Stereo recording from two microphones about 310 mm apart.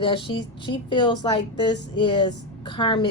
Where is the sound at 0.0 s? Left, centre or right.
Centre.